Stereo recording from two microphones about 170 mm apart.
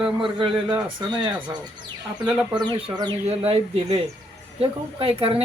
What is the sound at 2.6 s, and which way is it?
Speech, 25° right (ahead or behind).